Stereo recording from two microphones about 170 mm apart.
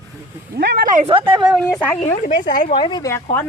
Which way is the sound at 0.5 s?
75° right (ahead or behind).